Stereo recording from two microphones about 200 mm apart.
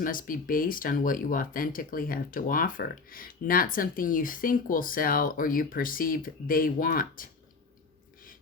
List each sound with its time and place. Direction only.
0.0 s speech: 45° left (ahead or behind)